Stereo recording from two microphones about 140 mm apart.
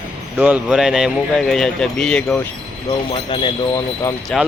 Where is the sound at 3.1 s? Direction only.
40° left (ahead or behind).